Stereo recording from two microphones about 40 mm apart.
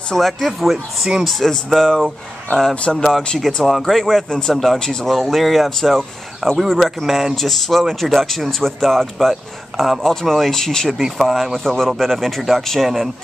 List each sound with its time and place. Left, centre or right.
0.1 s speech: centre
2.7 s speech: left
3.0 s speech: centre
6.6 s speech: centre
9.3 s speech: centre
10.0 s speech: centre
10.9 s speech: centre
11.5 s speech: centre
12.8 s speech: centre